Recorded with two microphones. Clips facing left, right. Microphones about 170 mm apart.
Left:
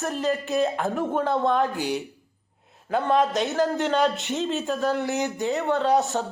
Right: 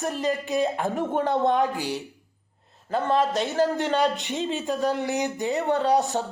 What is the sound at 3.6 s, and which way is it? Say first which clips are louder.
A man's voice: even; 10° right (ahead or behind).